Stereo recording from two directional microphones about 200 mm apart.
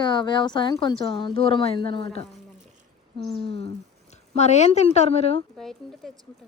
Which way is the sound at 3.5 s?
30° left (ahead or behind).